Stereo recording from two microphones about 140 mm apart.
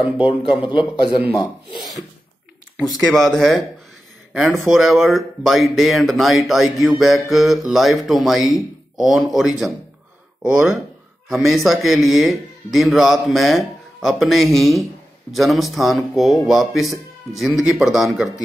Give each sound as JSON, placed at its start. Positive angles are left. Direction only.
{"t": 0.5, "sound": "a man's voice", "side_deg": 35}
{"t": 3.0, "sound": "speech", "side_deg": 0}